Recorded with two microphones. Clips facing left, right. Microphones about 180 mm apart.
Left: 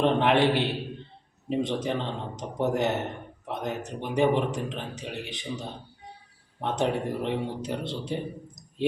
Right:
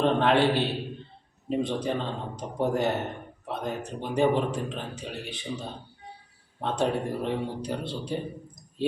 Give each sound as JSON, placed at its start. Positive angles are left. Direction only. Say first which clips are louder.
{"t": 0.0, "sound": "a man's voice", "louder": "even", "side_deg": 20}